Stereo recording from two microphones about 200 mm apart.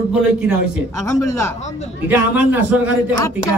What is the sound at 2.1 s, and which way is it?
A man's voice, 10° right (ahead or behind).